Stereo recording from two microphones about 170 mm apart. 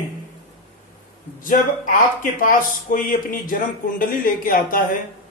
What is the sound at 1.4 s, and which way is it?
A man's voice, 55° left (ahead or behind).